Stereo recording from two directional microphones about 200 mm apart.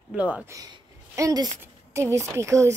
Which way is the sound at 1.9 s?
15° right (ahead or behind).